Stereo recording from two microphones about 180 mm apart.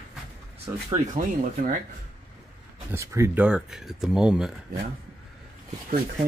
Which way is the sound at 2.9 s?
15° right (ahead or behind).